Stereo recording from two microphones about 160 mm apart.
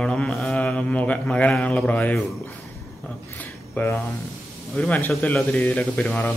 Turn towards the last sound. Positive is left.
turn(degrees=5)  # may be behind; listen again after turning